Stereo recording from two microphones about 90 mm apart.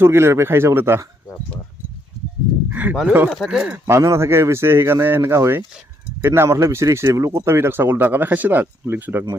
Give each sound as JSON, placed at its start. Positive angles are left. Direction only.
{"t": 0.0, "sound": "speech", "side_deg": -30}
{"t": 2.6, "sound": "speech", "side_deg": -15}
{"t": 3.2, "sound": "speech", "side_deg": 0}
{"t": 3.7, "sound": "speech", "side_deg": -30}